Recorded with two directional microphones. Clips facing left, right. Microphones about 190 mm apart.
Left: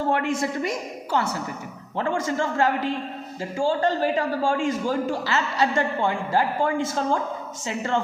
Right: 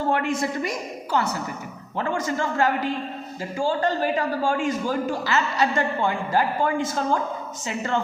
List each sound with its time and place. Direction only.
0.1 s a man's voice: 25° left (ahead or behind)